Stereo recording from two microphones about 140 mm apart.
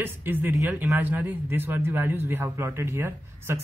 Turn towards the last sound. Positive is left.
turn(degrees=-20)  # may be behind; listen again after turning